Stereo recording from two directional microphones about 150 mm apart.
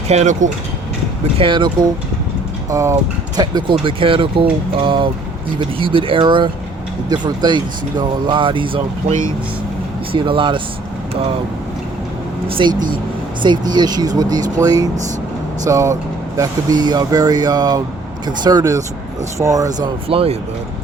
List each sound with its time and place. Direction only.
0.1 s speech: 50° right (ahead or behind)
1.4 s speech: 35° right (ahead or behind)
12.5 s speech: 35° right (ahead or behind)
20.1 s speech: 40° right (ahead or behind)